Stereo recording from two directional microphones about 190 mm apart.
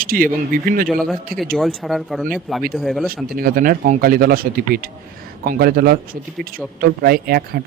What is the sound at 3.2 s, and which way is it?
Speech, 50° right (ahead or behind).